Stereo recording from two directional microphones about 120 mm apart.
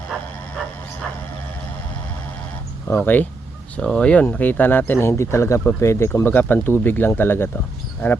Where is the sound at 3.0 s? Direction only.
15° left (ahead or behind).